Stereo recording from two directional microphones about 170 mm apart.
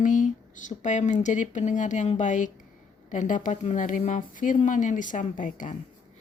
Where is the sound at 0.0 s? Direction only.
50° left (ahead or behind).